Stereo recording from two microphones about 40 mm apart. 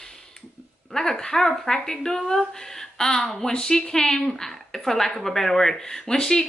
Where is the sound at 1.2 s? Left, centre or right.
Centre.